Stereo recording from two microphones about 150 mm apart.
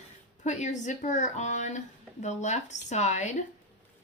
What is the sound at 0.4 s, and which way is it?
Speech, 55° left (ahead or behind).